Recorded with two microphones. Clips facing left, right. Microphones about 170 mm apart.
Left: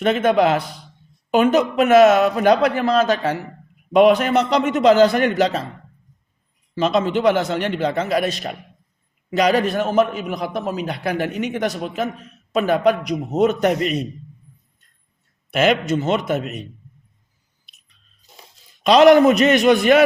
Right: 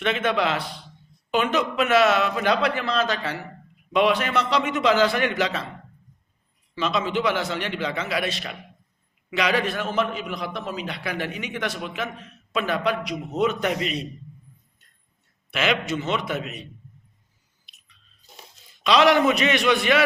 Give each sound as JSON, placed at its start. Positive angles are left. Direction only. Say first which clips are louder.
{"t": 0.0, "sound": "a man's voice", "louder": "left 7 dB", "side_deg": 45}
{"t": 6.7, "sound": "a man's voice", "louder": "left 6 dB", "side_deg": 45}
{"t": 15.4, "sound": "a man's voice", "louder": "left 7 dB", "side_deg": 45}
{"t": 18.8, "sound": "a man's voice", "louder": "left 7 dB", "side_deg": 45}